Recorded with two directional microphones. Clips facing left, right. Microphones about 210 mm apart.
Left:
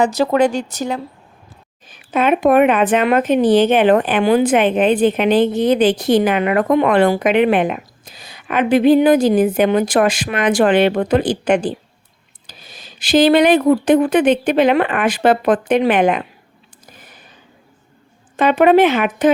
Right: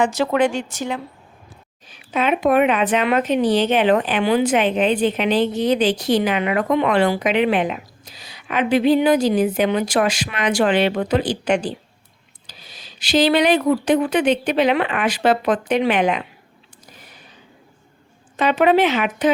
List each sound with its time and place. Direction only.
0.0 s speech: 40° left (ahead or behind)
1.9 s speech: 50° left (ahead or behind)
18.3 s speech: 50° left (ahead or behind)